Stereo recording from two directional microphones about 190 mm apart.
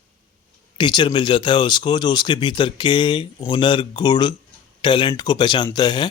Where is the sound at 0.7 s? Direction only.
25° left (ahead or behind).